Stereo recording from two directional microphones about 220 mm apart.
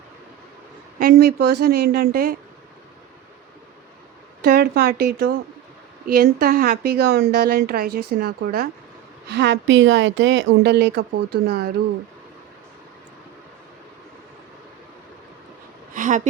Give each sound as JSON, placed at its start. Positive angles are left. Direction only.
{"t": 0.9, "sound": "a woman's voice", "side_deg": -40}
{"t": 4.4, "sound": "a woman's voice", "side_deg": -45}
{"t": 16.0, "sound": "a sound", "side_deg": -35}